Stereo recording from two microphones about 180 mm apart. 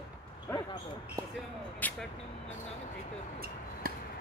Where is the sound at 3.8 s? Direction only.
55° right (ahead or behind).